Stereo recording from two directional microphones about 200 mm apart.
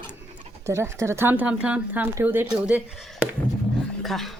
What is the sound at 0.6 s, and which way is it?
Speech, 15° right (ahead or behind).